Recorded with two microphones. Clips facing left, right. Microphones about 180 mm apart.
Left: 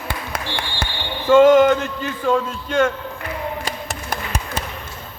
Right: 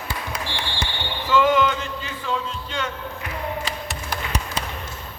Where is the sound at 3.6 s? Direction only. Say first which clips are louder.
Left 2 dB; 50° left (ahead or behind).